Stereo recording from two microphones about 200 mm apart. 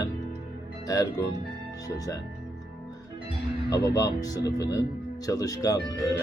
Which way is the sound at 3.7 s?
20° left (ahead or behind).